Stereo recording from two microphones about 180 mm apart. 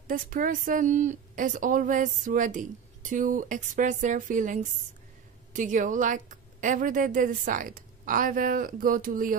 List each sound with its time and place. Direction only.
0.1 s speech: 50° right (ahead or behind)